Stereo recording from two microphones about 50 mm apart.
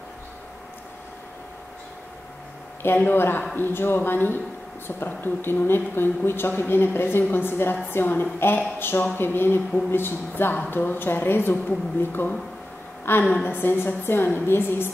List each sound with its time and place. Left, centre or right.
2.8 s speech: left
13.3 s speech: left